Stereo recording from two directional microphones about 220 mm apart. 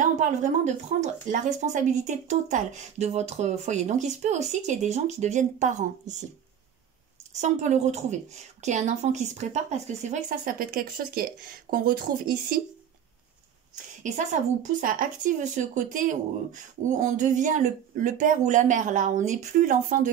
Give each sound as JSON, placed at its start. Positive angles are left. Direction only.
{"t": 0.0, "sound": "a sound", "side_deg": -35}
{"t": 1.3, "sound": "speech", "side_deg": -35}
{"t": 7.3, "sound": "speech", "side_deg": -30}
{"t": 14.0, "sound": "speech", "side_deg": -35}